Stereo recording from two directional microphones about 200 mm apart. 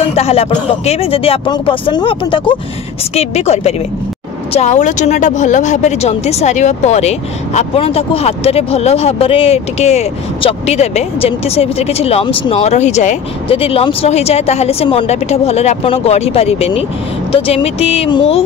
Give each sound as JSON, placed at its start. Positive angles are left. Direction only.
{"t": 0.0, "sound": "speech", "side_deg": 30}